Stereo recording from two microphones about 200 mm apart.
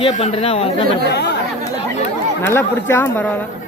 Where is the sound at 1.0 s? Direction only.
60° left (ahead or behind).